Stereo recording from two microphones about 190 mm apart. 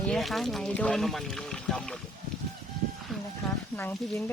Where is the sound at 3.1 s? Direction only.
Centre (ahead or behind).